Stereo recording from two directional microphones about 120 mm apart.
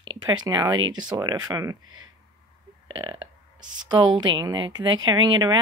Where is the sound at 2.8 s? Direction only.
40° right (ahead or behind).